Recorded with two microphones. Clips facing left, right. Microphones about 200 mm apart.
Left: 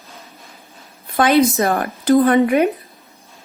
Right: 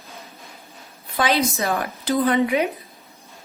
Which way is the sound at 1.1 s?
50° left (ahead or behind).